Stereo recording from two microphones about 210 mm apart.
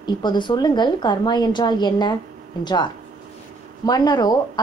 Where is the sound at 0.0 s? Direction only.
20° left (ahead or behind).